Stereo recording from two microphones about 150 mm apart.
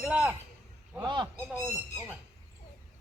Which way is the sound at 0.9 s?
30° right (ahead or behind).